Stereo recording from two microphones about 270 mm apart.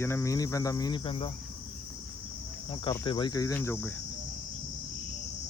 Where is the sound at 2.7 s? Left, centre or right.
Centre.